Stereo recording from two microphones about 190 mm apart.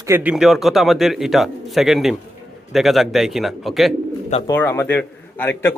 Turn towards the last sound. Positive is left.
turn(degrees=10)  # may be behind; listen again after turning